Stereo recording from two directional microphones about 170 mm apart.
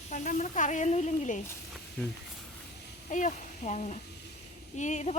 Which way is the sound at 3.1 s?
45° left (ahead or behind).